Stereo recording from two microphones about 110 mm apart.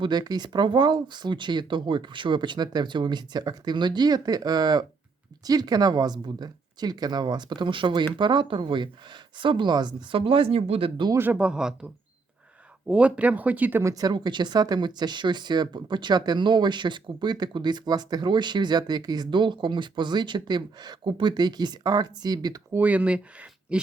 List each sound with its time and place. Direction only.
0.0 s a woman's voice: 40° right (ahead or behind)
10.2 s speech: 55° right (ahead or behind)
11.1 s speech: 15° right (ahead or behind)
12.9 s speech: 10° right (ahead or behind)
13.9 s speech: 40° right (ahead or behind)
22.7 s speech: 15° right (ahead or behind)